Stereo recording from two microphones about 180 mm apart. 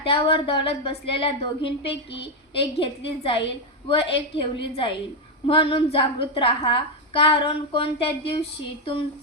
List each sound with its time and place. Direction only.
0.1 s a woman's voice: 30° left (ahead or behind)